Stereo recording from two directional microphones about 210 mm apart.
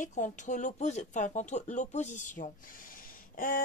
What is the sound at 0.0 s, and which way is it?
Speech, 35° left (ahead or behind).